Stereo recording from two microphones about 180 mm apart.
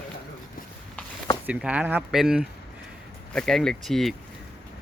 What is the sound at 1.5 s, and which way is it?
A man's voice, 5° right (ahead or behind).